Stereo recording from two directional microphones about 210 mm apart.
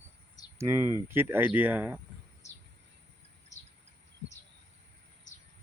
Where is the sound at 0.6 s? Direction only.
10° right (ahead or behind).